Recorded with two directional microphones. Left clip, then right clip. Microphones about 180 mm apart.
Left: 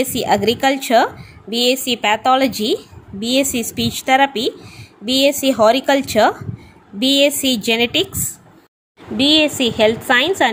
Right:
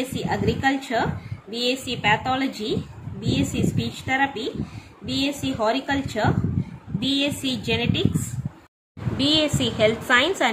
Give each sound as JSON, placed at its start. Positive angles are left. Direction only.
{"t": 0.0, "sound": "a woman's voice", "side_deg": 50}
{"t": 9.1, "sound": "a woman's voice", "side_deg": 30}